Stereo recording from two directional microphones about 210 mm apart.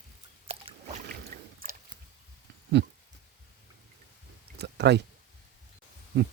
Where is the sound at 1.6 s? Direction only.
45° right (ahead or behind).